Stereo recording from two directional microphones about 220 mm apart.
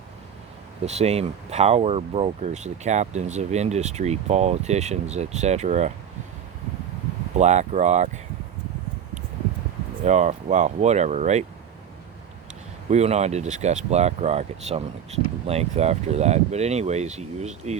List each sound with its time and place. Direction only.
0.9 s speech: 30° right (ahead or behind)
7.3 s speech: 30° right (ahead or behind)
10.0 s speech: 30° right (ahead or behind)
12.9 s speech: 30° right (ahead or behind)